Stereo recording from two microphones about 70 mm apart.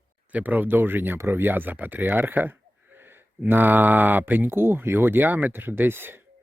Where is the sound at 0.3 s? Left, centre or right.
Right.